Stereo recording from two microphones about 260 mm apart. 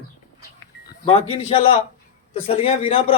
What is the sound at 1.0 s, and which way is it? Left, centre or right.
Speech, left.